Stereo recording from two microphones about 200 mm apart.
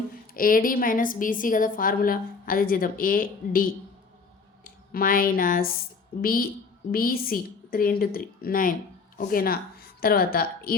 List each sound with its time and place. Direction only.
0.3 s a woman's voice: 45° left (ahead or behind)